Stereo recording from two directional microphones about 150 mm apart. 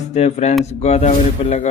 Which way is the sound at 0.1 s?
45° left (ahead or behind).